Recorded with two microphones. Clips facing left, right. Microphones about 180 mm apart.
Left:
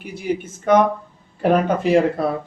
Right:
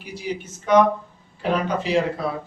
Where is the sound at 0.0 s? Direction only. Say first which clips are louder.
Left 5 dB; 55° left (ahead or behind).